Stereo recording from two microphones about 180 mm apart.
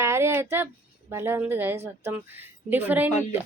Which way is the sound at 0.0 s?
15° right (ahead or behind).